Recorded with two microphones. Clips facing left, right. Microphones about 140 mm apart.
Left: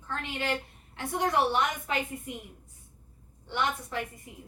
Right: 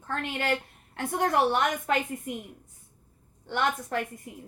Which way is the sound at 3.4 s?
50° right (ahead or behind).